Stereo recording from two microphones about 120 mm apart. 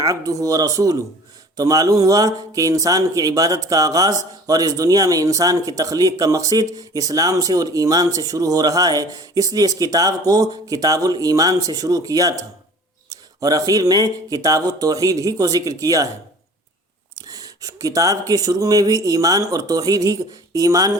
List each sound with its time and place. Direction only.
0.0 s speech: 30° right (ahead or behind)
17.2 s speech: 30° right (ahead or behind)